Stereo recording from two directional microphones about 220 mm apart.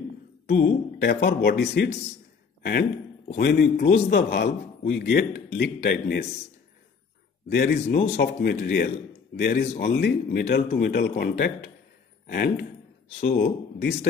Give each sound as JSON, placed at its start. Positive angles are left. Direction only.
{"t": 0.5, "sound": "a man's voice", "side_deg": 50}
{"t": 7.4, "sound": "a man's voice", "side_deg": 50}